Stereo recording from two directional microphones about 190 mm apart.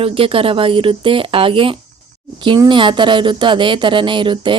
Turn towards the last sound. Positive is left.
turn(degrees=-25)  # may be behind; listen again after turning